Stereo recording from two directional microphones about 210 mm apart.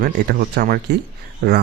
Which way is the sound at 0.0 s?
50° right (ahead or behind).